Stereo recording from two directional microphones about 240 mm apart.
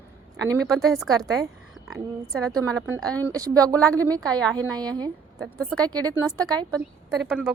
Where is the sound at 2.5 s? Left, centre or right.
Centre.